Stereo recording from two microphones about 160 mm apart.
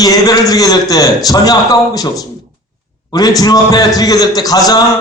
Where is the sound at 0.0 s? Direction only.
20° left (ahead or behind).